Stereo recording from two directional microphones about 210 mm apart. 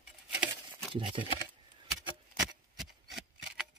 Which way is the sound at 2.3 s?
Centre (ahead or behind).